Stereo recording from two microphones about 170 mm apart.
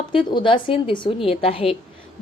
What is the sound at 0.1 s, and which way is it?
A woman's voice, 30° left (ahead or behind).